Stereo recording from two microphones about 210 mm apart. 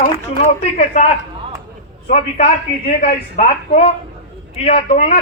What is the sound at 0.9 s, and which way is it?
A man's voice, 30° left (ahead or behind).